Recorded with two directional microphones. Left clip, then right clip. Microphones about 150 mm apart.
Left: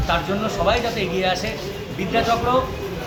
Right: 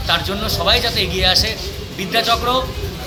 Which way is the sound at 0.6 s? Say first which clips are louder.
Right 5 dB; 5° right (ahead or behind).